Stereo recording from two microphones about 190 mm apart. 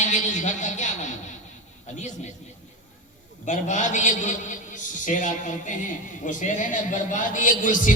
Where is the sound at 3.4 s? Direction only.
40° left (ahead or behind).